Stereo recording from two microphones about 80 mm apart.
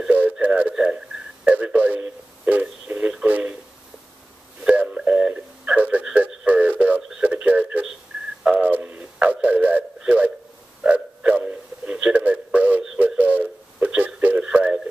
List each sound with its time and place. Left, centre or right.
0.0 s radio: centre
3.3 s a sound: right
4.8 s radio: centre
7.0 s radio: centre
7.2 s radio: centre
8.5 s a sound: right